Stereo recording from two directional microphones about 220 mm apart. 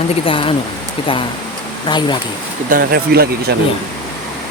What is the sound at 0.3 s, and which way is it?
Speech, 25° left (ahead or behind).